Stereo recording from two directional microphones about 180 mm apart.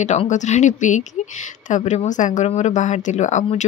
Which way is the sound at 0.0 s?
40° left (ahead or behind).